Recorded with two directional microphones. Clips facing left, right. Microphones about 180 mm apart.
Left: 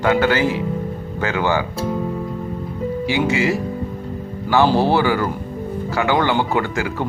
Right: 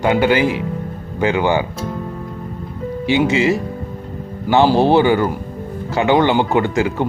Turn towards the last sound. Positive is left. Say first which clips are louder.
# right 5 dB
turn(degrees=-20)  # may be behind; listen again after turning